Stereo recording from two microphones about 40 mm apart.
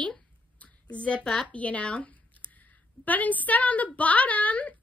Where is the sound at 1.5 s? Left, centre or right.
Left.